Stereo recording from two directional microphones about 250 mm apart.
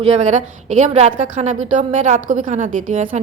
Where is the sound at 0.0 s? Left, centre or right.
Right.